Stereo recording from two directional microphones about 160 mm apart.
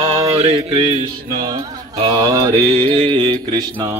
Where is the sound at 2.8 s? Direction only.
30° right (ahead or behind).